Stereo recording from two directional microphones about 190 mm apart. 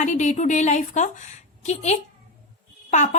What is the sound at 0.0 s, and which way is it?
A woman's voice, 40° left (ahead or behind).